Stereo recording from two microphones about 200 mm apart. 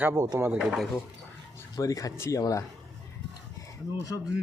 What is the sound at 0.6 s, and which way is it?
Speech, centre (ahead or behind).